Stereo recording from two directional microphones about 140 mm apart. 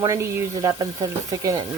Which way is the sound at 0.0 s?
25° right (ahead or behind).